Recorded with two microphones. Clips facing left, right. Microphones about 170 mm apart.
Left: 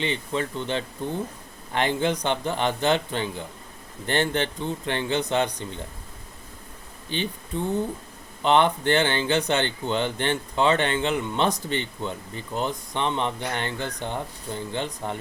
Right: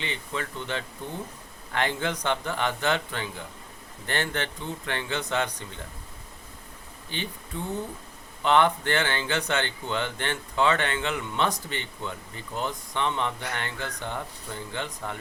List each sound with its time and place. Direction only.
0.0 s speech: 20° left (ahead or behind)
7.1 s speech: 20° left (ahead or behind)